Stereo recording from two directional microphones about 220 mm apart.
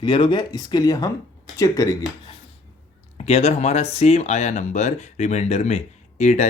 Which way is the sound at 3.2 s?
30° left (ahead or behind).